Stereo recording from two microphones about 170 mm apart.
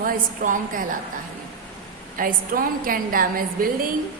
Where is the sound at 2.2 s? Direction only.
55° right (ahead or behind).